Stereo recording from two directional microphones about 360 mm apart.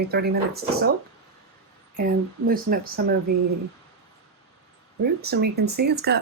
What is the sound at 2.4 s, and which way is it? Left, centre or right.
Speech, right.